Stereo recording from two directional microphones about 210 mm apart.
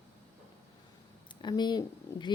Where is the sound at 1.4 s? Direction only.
20° left (ahead or behind).